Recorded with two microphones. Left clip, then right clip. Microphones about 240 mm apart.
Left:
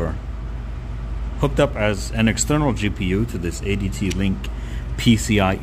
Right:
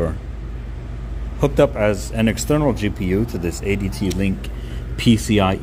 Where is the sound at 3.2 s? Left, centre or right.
Left.